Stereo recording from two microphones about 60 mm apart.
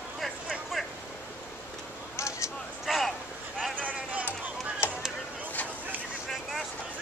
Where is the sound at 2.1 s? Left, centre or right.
Left.